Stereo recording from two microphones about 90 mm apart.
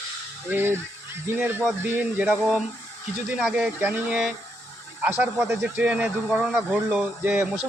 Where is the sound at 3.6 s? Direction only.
20° right (ahead or behind).